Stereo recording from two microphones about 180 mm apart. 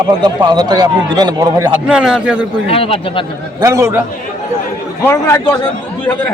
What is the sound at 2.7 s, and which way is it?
Speech, 30° left (ahead or behind).